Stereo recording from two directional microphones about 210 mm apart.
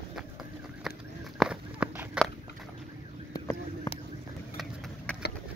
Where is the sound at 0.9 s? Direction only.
Centre (ahead or behind).